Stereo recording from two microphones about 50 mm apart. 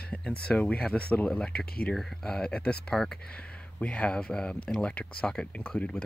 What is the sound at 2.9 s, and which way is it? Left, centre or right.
Speech, centre.